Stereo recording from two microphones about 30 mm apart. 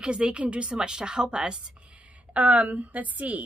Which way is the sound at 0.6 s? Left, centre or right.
Right.